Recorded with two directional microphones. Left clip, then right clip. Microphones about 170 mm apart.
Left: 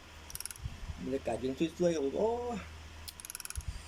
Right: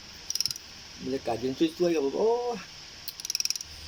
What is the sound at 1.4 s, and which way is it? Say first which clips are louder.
Speech: right 5 dB; 15° left (ahead or behind).